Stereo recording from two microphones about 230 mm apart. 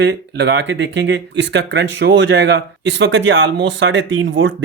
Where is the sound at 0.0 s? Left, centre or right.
Right.